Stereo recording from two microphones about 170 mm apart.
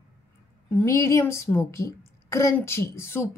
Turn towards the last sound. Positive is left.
turn(degrees=15)  # may be behind; listen again after turning